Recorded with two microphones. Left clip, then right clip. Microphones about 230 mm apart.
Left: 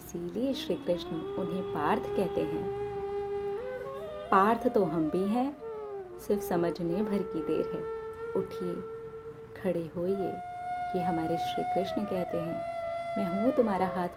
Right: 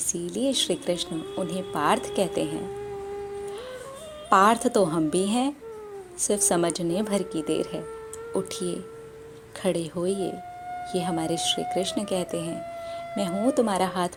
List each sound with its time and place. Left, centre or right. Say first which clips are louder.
0.1 s speech: right 6 dB; centre
4.3 s speech: right 6 dB; centre
9.6 s speech: right 5 dB; centre
13.3 s speech: right 4 dB; centre
13.7 s speech: right 5 dB; centre